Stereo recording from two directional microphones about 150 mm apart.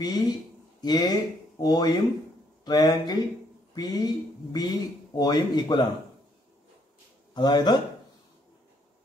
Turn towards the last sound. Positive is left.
turn(degrees=30)  # may be behind; listen again after turning